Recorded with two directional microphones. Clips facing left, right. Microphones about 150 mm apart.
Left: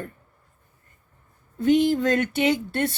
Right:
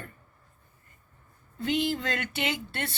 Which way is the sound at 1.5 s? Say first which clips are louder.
Left 9 dB; 50° left (ahead or behind).